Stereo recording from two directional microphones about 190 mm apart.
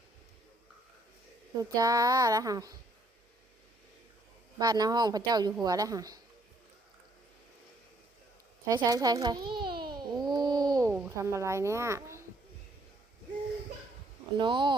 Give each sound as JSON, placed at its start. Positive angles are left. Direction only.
{"t": 1.5, "sound": "a woman's voice", "side_deg": -20}
{"t": 4.6, "sound": "a woman's voice", "side_deg": -20}
{"t": 8.6, "sound": "a woman's voice", "side_deg": -20}
{"t": 9.5, "sound": "babbling", "side_deg": -25}
{"t": 14.3, "sound": "a woman's voice", "side_deg": -25}